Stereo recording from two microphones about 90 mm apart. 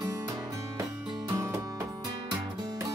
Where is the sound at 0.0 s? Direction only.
45° right (ahead or behind).